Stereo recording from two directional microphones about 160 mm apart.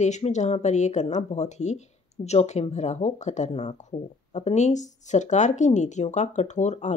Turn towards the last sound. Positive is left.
turn(degrees=45)  # may be behind; listen again after turning